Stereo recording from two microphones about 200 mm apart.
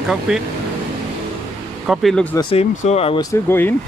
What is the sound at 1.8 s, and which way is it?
Speech, centre (ahead or behind).